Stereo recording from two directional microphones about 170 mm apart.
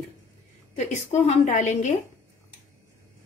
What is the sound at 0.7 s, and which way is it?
A woman's voice, 45° left (ahead or behind).